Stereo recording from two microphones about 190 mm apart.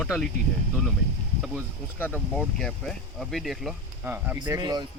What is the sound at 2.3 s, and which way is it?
Speech, 5° left (ahead or behind).